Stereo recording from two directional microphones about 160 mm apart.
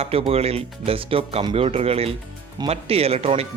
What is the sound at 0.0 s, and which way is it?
Speech, 35° right (ahead or behind).